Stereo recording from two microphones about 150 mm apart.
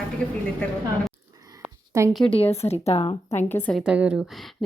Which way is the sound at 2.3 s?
40° left (ahead or behind).